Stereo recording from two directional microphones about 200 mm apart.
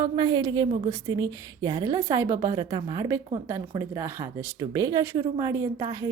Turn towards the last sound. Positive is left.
turn(degrees=-20)  # may be behind; listen again after turning